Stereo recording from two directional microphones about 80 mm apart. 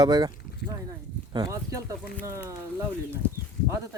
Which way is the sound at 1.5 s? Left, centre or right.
Right.